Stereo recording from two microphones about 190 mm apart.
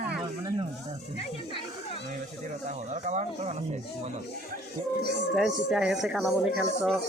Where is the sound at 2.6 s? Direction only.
40° right (ahead or behind).